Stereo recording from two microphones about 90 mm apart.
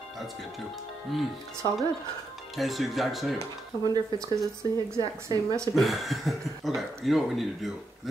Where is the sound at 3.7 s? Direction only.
55° left (ahead or behind).